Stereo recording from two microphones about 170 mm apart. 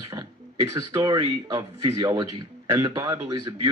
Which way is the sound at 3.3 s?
25° right (ahead or behind).